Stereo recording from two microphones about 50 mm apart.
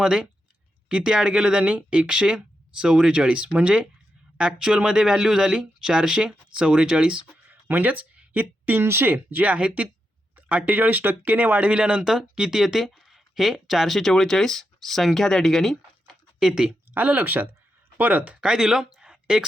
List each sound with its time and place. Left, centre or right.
0.0 s speech: centre
7.4 s a sound: right
8.3 s speech: right
9.4 s speech: right
11.8 s speech: centre
16.4 s speech: centre
16.9 s speech: right
18.3 s speech: centre